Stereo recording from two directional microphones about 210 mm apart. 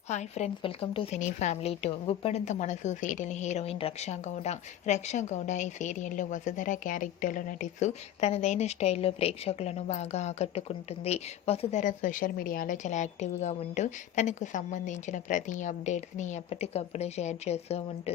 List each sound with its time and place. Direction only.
0.1 s speech: 35° left (ahead or behind)